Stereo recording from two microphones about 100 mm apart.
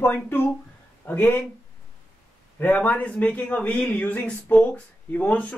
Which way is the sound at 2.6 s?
15° left (ahead or behind).